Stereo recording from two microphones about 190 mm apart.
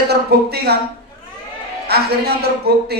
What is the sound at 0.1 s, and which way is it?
Speech, 55° right (ahead or behind).